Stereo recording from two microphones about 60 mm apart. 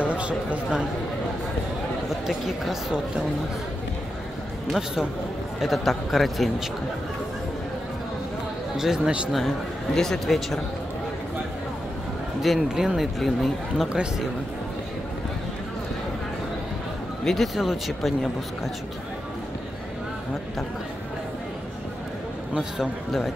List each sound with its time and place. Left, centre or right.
0.0 s speech: right
2.2 s speech: centre
4.6 s speech: centre
8.7 s speech: centre
9.9 s speech: centre
12.4 s speech: centre
17.2 s speech: centre
17.6 s speech: centre
22.5 s speech: centre